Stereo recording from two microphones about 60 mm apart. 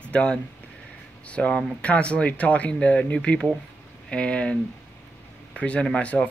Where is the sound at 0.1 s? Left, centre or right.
Centre.